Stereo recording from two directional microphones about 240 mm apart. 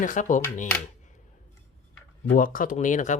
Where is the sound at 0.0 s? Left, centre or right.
Left.